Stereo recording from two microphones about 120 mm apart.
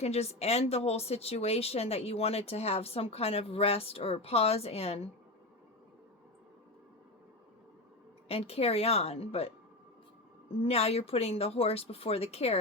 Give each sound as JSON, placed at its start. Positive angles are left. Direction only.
{"t": 0.0, "sound": "a woman's voice", "side_deg": 60}
{"t": 8.3, "sound": "a woman's voice", "side_deg": 55}
{"t": 10.6, "sound": "a woman's voice", "side_deg": 60}